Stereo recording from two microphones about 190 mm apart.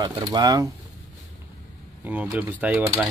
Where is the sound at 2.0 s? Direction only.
5° right (ahead or behind).